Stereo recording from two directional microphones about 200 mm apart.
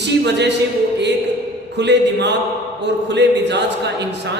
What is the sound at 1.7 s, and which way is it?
A man's voice, 60° right (ahead or behind).